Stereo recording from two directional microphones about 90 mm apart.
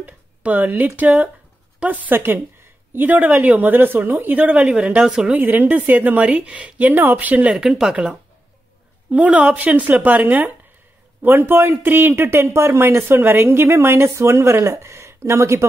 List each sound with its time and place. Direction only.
0.0 s speech: 20° right (ahead or behind)
7.5 s speech: 5° right (ahead or behind); by 15.6 s 30° right (ahead or behind)